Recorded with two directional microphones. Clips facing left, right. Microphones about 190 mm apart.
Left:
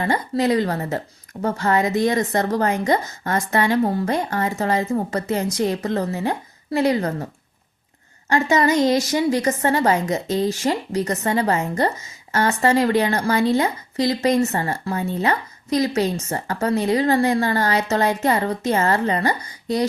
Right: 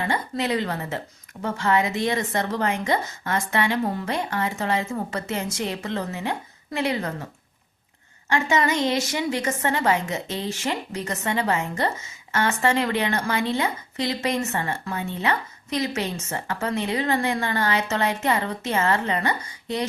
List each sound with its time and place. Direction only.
0.0 s a woman's voice: 40° left (ahead or behind)
8.3 s a woman's voice: 40° left (ahead or behind)